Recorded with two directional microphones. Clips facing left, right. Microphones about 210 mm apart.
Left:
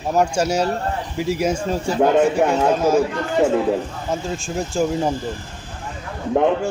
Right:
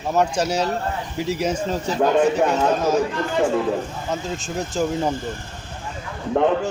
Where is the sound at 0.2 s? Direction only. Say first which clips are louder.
Left 2 dB; 10° left (ahead or behind).